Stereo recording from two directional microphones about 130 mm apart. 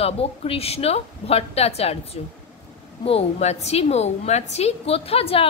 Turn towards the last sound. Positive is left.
turn(degrees=45)  # may be behind; listen again after turning